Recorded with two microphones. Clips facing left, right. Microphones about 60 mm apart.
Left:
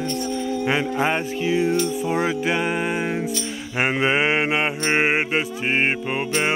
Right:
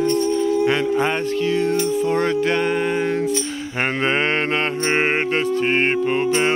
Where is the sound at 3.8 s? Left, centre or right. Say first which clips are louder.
Even; centre.